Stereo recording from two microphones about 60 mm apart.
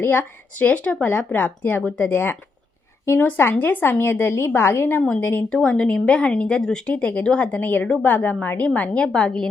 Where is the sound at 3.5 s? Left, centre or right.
Left.